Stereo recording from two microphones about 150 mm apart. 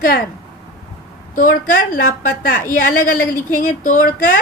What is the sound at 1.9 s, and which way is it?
A woman's voice, 70° left (ahead or behind).